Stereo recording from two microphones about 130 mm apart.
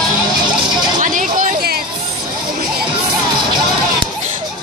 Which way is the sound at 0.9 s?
90° right.